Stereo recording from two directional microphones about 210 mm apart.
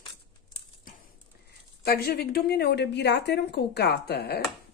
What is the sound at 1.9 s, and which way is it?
A woman's voice, 50° left (ahead or behind).